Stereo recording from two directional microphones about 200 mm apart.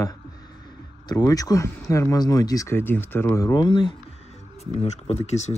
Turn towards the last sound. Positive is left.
turn(degrees=35)  # may be behind; listen again after turning